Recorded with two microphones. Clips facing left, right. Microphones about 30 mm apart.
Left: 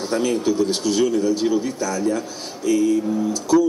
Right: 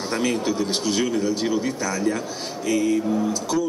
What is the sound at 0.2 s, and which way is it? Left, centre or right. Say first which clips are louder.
A man's voice: left 3 dB; centre.